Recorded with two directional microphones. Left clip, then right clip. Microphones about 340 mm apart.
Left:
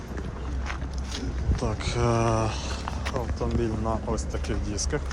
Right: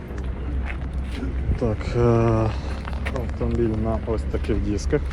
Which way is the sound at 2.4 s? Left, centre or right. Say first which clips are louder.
Right 2 dB; centre.